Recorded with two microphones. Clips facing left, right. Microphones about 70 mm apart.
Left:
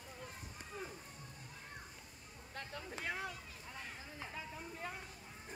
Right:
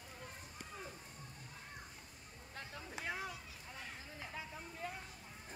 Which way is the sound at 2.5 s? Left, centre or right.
Left.